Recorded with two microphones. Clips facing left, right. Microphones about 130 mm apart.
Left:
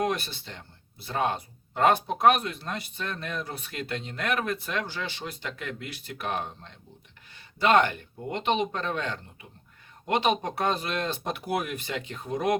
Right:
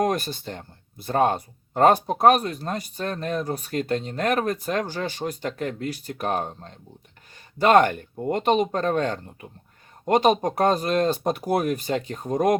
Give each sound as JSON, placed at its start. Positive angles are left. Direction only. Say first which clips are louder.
{"t": 0.0, "sound": "speech", "louder": "right 5 dB", "side_deg": -45}